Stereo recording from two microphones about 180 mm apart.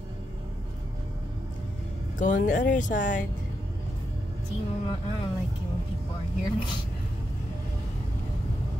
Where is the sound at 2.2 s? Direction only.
45° left (ahead or behind).